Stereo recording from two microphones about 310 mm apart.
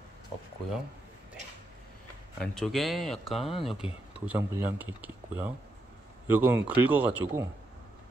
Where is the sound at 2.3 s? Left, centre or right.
Centre.